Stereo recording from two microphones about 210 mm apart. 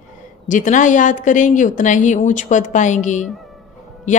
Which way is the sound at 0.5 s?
40° left (ahead or behind).